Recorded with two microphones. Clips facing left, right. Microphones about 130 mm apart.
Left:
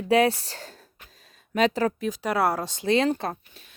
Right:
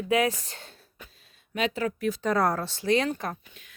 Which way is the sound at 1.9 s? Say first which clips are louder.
Even; 15° left (ahead or behind).